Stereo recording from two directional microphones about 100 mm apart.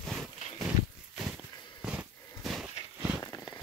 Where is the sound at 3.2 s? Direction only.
30° left (ahead or behind).